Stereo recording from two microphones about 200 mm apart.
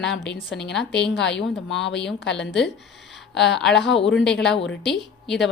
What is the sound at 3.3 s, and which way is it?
Speech, centre (ahead or behind).